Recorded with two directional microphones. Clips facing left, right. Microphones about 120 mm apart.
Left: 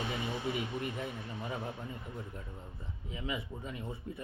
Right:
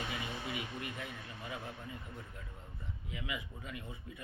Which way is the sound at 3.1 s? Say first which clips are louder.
Left 5 dB; 30° left (ahead or behind).